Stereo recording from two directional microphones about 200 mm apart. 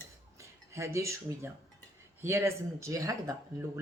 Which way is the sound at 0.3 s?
15° right (ahead or behind).